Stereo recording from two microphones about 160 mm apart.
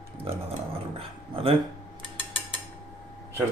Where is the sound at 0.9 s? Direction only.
35° right (ahead or behind).